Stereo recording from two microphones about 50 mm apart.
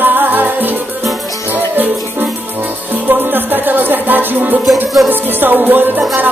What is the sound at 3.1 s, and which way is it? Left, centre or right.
Music, right.